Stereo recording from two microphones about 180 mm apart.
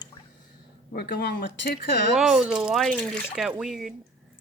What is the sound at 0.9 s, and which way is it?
Speech, 60° left (ahead or behind).